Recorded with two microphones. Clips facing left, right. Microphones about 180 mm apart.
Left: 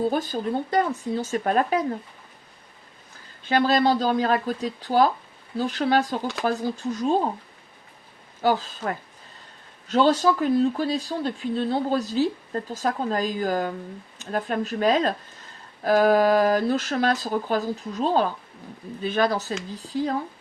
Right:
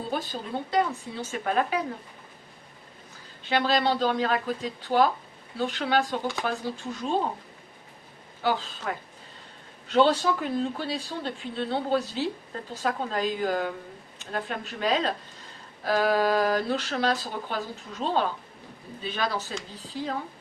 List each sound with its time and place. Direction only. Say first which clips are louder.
0.1 s speech: left 6 dB; 45° left (ahead or behind)
3.5 s speech: left 4 dB; 40° left (ahead or behind)
8.4 s speech: left 5 dB; 40° left (ahead or behind)
9.9 s speech: left 2 dB; 40° left (ahead or behind)